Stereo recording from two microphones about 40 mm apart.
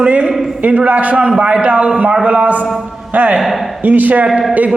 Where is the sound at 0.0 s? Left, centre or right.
Right.